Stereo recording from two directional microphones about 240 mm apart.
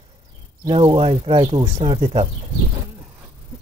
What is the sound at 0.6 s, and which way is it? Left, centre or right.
Speech, centre.